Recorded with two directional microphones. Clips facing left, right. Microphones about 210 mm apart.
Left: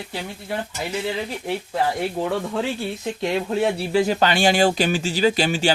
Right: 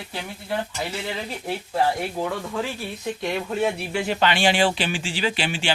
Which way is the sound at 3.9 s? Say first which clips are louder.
Left 4 dB; 40° left (ahead or behind).